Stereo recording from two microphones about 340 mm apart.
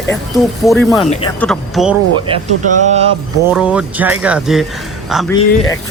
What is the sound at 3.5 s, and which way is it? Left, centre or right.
Speech, centre.